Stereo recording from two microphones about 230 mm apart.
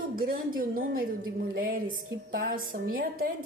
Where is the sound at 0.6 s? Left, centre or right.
Right.